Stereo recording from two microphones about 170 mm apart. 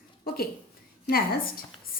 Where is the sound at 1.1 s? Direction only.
60° left (ahead or behind).